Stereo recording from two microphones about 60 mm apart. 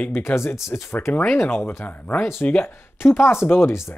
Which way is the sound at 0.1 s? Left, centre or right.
Left.